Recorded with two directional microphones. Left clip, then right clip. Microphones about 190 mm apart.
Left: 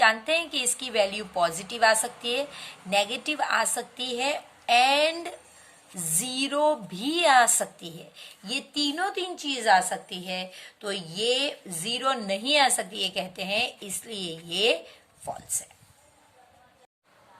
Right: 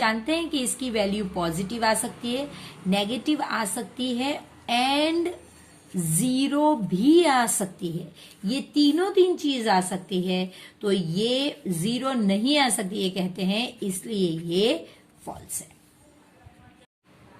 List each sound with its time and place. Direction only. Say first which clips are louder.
0.0 s a woman's voice: left 3 dB; 25° left (ahead or behind)